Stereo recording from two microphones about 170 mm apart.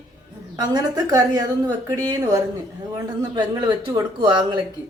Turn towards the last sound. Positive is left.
turn(degrees=-25)  # may be behind; listen again after turning